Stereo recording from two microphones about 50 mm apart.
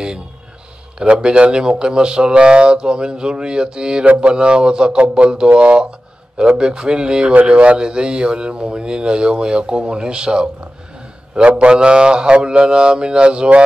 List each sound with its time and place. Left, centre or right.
0.9 s speech: centre
4.0 s speech: right